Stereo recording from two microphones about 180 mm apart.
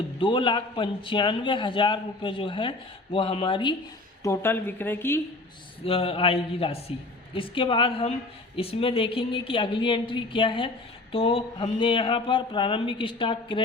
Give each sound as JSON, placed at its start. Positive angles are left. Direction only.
{"t": 0.2, "sound": "a man's voice", "side_deg": 30}
{"t": 4.2, "sound": "speech", "side_deg": 15}
{"t": 5.8, "sound": "a man's voice", "side_deg": 30}